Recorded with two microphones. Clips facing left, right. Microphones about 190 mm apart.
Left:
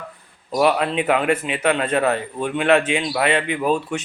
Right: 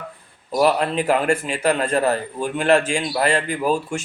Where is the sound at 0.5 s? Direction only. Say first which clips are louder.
Even; centre (ahead or behind).